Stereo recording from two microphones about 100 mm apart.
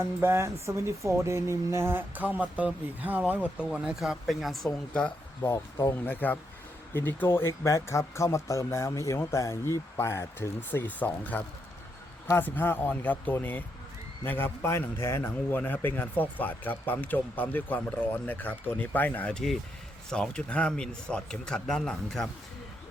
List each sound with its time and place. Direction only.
0.0 s speech: 25° right (ahead or behind); by 5.1 s 5° left (ahead or behind)
5.4 s speech: 30° left (ahead or behind)
6.1 s speech: 20° left (ahead or behind)